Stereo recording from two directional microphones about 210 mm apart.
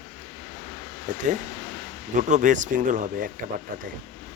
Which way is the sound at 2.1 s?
35° right (ahead or behind).